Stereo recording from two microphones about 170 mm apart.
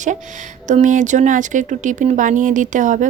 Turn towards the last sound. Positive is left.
turn(degrees=-50)  # may be behind; listen again after turning